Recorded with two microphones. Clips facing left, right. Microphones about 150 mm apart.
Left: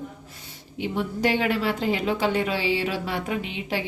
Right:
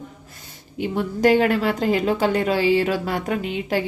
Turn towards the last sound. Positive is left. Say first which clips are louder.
# right 5 dB
turn(degrees=-45)  # may be behind; listen again after turning